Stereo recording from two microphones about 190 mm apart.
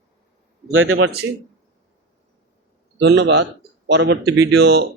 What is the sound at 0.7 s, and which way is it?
Speech, 90° right.